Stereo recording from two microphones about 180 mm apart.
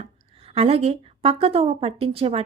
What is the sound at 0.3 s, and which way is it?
Speech, 35° right (ahead or behind).